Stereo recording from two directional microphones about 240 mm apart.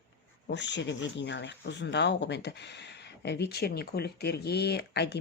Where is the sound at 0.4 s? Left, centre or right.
Left.